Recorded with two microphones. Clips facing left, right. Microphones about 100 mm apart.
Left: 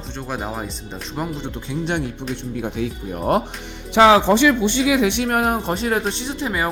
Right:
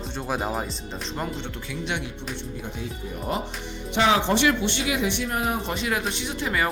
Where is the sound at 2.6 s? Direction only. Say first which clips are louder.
Left 9 dB; 75° left (ahead or behind).